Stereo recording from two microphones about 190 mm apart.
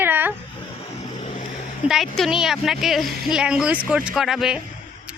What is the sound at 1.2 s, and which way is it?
Vehicle, 30° left (ahead or behind).